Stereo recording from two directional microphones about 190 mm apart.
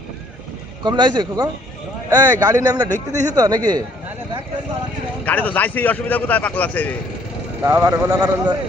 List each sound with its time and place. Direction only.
0.8 s a man's voice: 25° right (ahead or behind)
5.2 s a man's voice: 10° left (ahead or behind)
7.6 s a man's voice: 10° right (ahead or behind)